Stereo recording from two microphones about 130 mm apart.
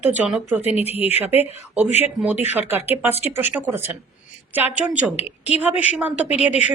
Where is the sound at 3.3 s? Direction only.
15° right (ahead or behind).